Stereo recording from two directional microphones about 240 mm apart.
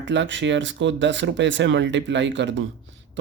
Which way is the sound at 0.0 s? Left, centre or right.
Right.